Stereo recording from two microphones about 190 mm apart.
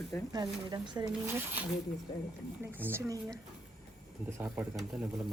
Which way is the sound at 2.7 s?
10° right (ahead or behind).